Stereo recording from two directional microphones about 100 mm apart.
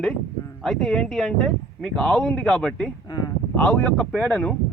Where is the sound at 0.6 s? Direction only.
5° left (ahead or behind).